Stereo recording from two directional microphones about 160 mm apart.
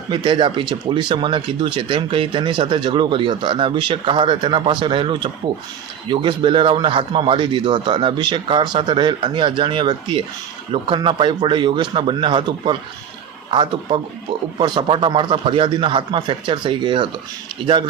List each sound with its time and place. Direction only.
0.1 s speech: 30° right (ahead or behind)